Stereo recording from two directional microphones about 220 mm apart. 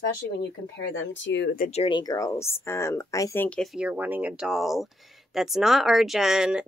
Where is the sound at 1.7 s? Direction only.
25° left (ahead or behind).